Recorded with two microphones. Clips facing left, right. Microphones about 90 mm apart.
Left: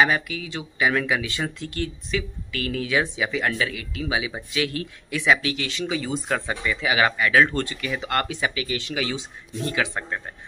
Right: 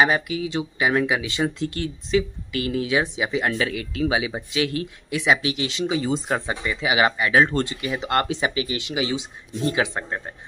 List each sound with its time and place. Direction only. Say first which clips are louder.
0.0 s speech: right 1 dB; 25° right (ahead or behind)